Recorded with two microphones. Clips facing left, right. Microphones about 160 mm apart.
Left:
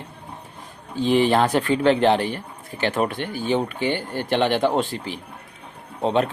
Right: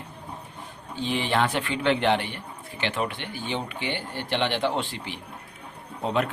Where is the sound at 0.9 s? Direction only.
40° left (ahead or behind).